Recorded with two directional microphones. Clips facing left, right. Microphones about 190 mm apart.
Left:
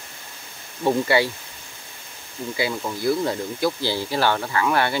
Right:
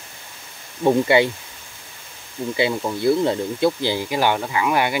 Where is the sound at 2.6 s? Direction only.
25° right (ahead or behind).